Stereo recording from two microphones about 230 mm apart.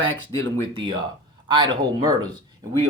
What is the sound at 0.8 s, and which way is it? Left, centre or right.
Speech, centre.